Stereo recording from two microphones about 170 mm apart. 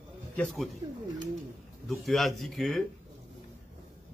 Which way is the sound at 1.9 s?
Centre (ahead or behind).